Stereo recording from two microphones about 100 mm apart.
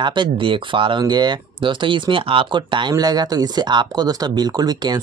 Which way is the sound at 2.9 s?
40° right (ahead or behind).